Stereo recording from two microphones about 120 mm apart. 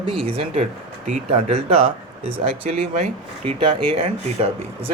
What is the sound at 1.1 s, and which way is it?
Speech, 60° right (ahead or behind).